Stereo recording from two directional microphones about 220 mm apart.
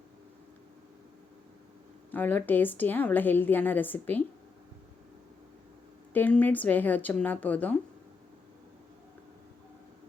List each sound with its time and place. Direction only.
2.0 s a woman's voice: 10° left (ahead or behind)
6.1 s a woman's voice: 5° left (ahead or behind)